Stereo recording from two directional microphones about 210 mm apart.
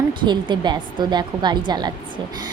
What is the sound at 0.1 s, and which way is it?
A woman's voice, 20° right (ahead or behind).